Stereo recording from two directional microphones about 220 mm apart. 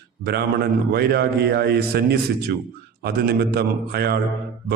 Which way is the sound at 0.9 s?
45° right (ahead or behind).